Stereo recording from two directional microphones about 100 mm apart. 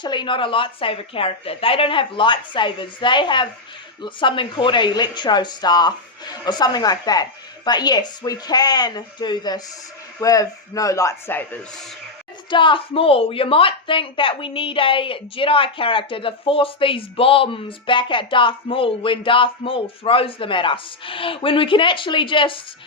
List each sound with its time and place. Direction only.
0.0 s a woman's voice: 50° left (ahead or behind); by 11.3 s 30° left (ahead or behind)
12.5 s speech: 55° left (ahead or behind)